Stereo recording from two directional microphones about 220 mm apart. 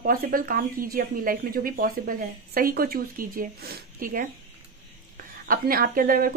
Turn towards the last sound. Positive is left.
turn(degrees=-40)  # may be behind; listen again after turning